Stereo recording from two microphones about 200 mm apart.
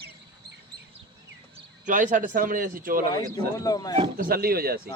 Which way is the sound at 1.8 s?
40° right (ahead or behind).